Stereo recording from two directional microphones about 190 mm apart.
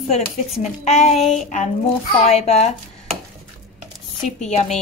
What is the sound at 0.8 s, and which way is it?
Speech, 35° left (ahead or behind).